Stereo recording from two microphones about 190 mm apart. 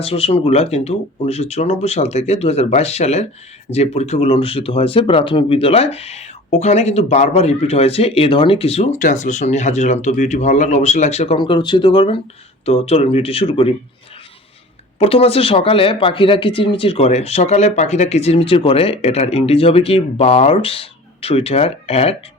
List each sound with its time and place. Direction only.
0.0 s speech: 30° left (ahead or behind)
14.9 s speech: 30° left (ahead or behind)